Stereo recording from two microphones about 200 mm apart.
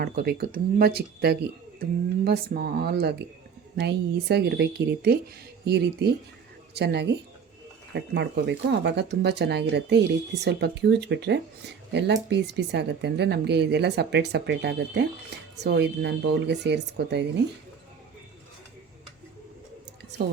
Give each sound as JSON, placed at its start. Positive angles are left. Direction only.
{"t": 0.0, "sound": "speech", "side_deg": -50}